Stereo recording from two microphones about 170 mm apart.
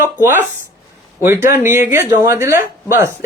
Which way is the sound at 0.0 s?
10° right (ahead or behind).